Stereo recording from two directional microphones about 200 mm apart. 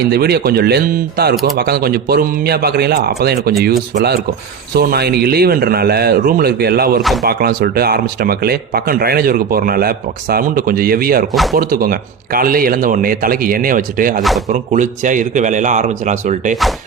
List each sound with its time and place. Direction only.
0.1 s speech: 55° right (ahead or behind)
14.2 s speech: centre (ahead or behind)
14.5 s speech: 40° right (ahead or behind)